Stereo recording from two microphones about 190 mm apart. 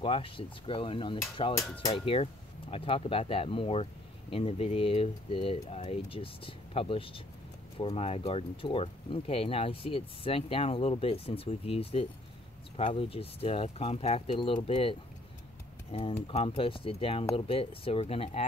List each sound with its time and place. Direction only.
0.0 s speech: 30° left (ahead or behind)
2.7 s speech: 30° left (ahead or behind)